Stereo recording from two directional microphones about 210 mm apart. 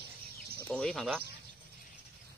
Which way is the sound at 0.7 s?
5° left (ahead or behind).